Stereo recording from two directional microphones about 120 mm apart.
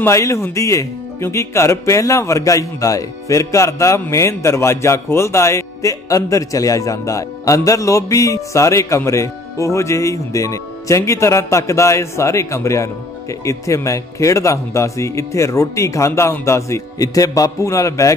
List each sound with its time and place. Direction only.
0.0 s speech: 25° left (ahead or behind)